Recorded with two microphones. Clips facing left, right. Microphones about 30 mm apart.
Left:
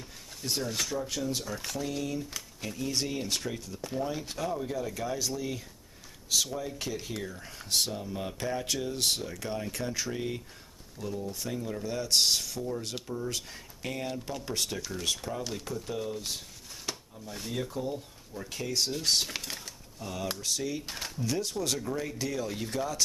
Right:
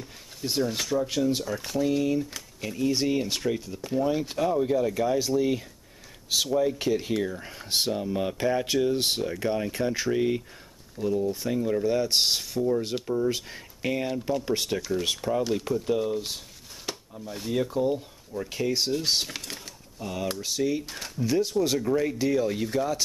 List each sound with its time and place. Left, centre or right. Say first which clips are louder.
0.4 s speech: right 5 dB; centre
1.4 s speech: right 8 dB; centre
16.9 s a sound: right 3 dB; centre
17.3 s speech: right 7 dB; centre